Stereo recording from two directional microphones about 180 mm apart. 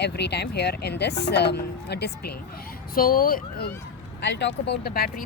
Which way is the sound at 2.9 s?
55° left (ahead or behind).